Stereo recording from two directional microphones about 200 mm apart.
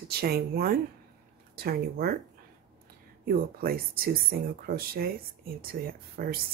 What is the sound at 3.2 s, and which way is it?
Speech, 50° right (ahead or behind).